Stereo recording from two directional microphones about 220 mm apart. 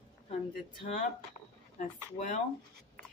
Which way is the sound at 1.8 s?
35° left (ahead or behind).